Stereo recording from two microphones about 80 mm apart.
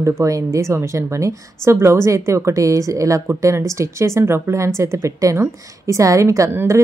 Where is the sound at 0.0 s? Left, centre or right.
Right.